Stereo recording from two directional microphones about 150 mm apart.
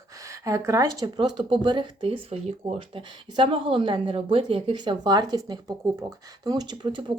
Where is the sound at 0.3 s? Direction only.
20° right (ahead or behind).